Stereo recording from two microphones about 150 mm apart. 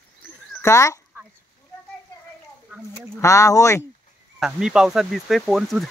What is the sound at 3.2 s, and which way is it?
Speech, 20° left (ahead or behind).